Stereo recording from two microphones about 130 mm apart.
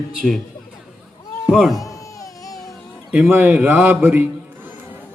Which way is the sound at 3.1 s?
10° right (ahead or behind).